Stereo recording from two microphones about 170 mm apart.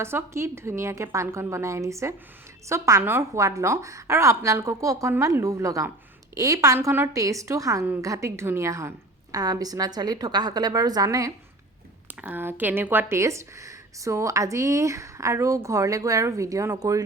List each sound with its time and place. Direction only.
0.0 s a woman's voice: 15° right (ahead or behind)